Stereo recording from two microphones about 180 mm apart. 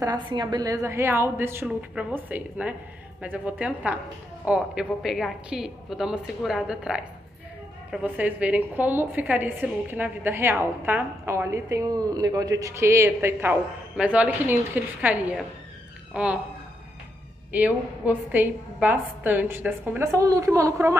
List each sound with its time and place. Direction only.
0.0 s a woman's voice: 25° right (ahead or behind); by 16.3 s 5° right (ahead or behind)
17.5 s a woman's voice: 10° right (ahead or behind)